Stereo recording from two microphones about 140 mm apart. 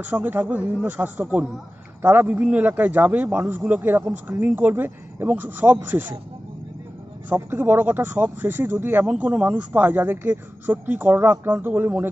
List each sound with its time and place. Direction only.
0.0 s speech: 15° right (ahead or behind)
7.2 s speech: 15° right (ahead or behind)